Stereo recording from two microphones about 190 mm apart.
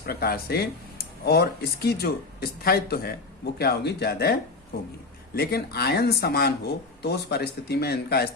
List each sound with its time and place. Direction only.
0.0 s speech: 55° left (ahead or behind)